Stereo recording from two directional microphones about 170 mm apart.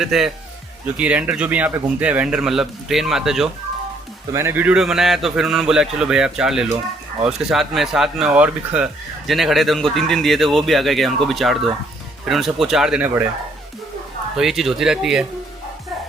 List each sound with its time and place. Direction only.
0.0 s speech: centre (ahead or behind)
4.3 s speech: 15° right (ahead or behind)
14.3 s speech: centre (ahead or behind)